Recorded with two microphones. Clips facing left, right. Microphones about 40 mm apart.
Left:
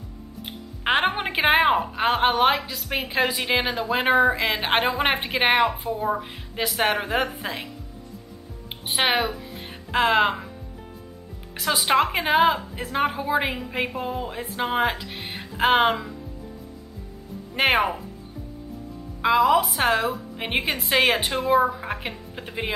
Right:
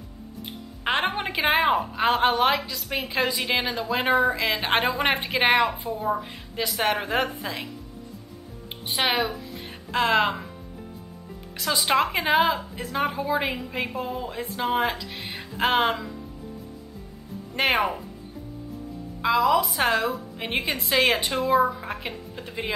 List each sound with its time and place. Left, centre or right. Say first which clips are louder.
0.8 s a sound: left 3 dB; centre
1.8 s a woman's voice: even; centre
7.0 s a woman's voice: left 1 dB; centre
8.6 s music: left 2 dB; centre
9.1 s speech: left 2 dB; centre
11.5 s music: left 2 dB; centre
11.8 s a woman's voice: left 1 dB; centre
17.6 s speech: left 2 dB; centre
19.2 s a woman's voice: left 2 dB; centre